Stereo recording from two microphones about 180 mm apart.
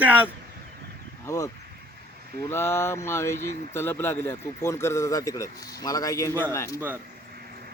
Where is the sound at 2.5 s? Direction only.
15° left (ahead or behind).